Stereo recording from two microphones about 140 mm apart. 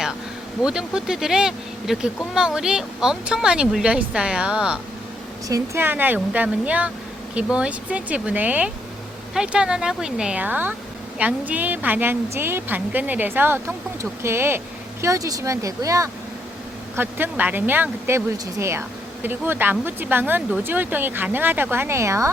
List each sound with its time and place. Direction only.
0.6 s speech: 5° right (ahead or behind)
5.5 s speech: 20° right (ahead or behind)